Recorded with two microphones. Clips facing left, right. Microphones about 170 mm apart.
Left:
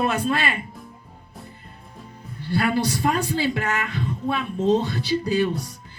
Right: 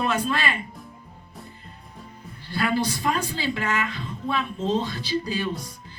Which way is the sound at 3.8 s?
50° left (ahead or behind).